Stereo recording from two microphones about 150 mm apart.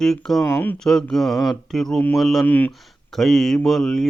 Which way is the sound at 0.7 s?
5° left (ahead or behind).